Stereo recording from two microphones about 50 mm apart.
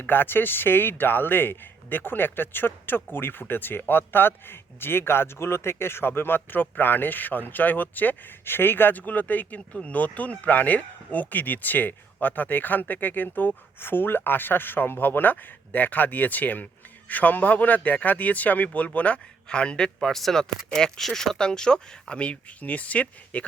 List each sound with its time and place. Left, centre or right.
0.0 s speech: left